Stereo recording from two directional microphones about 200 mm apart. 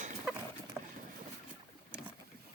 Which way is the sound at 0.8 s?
15° right (ahead or behind).